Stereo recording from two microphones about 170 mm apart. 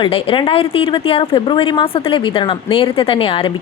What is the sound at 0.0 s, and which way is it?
Speech, 30° left (ahead or behind).